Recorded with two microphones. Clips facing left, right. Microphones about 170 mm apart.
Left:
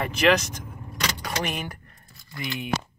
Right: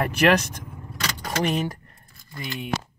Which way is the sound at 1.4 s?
35° right (ahead or behind).